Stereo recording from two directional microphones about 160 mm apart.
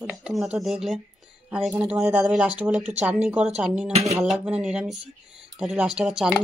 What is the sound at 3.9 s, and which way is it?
Speech, 40° right (ahead or behind).